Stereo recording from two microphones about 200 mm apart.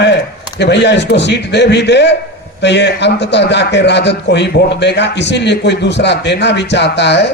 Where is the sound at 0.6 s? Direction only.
60° left (ahead or behind).